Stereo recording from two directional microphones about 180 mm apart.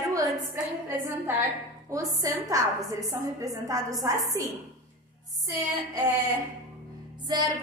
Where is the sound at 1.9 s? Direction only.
20° right (ahead or behind).